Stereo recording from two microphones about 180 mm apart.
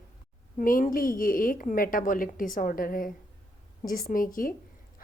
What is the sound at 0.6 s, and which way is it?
A woman's voice, 50° left (ahead or behind).